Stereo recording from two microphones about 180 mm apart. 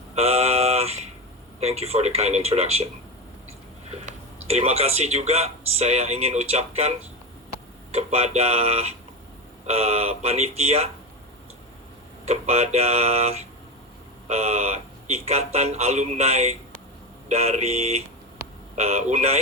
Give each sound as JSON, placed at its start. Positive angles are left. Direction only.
{"t": 0.2, "sound": "a sound", "side_deg": -35}
{"t": 1.5, "sound": "speech", "side_deg": -35}
{"t": 3.9, "sound": "speech", "side_deg": -35}
{"t": 7.9, "sound": "speech", "side_deg": -35}
{"t": 12.2, "sound": "speech", "side_deg": -35}